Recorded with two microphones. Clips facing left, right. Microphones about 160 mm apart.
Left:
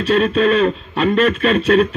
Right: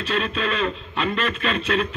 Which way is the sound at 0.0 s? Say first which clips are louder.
Left 10 dB; 55° left (ahead or behind).